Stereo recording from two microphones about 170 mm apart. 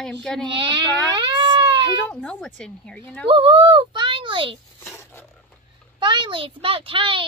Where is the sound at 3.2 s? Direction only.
30° right (ahead or behind).